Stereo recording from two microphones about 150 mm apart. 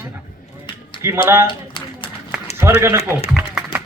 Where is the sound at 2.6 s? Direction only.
15° right (ahead or behind).